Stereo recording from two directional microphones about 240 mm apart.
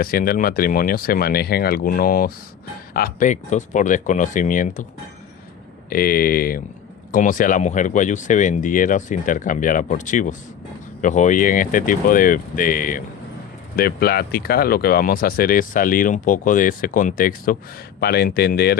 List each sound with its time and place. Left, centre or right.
0.0 s speech: left
5.9 s speech: left